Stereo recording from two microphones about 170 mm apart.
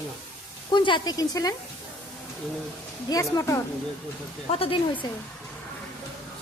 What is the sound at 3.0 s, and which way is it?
Speech, 20° left (ahead or behind).